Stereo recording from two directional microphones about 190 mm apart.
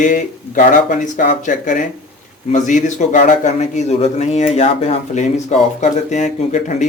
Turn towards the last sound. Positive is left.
turn(degrees=40)  # may be behind; listen again after turning